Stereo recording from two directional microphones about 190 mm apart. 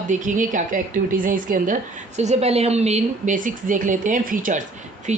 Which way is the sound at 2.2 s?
35° right (ahead or behind).